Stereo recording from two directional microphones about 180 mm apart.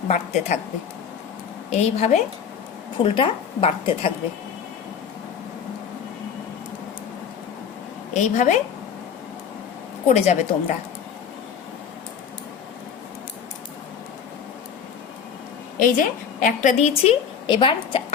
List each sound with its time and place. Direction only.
0.1 s a woman's voice: 40° left (ahead or behind)
1.7 s a woman's voice: 35° left (ahead or behind)
8.1 s a woman's voice: 40° left (ahead or behind)
10.1 s a woman's voice: 40° left (ahead or behind)
15.8 s a woman's voice: 45° left (ahead or behind); by 18.0 s 25° left (ahead or behind)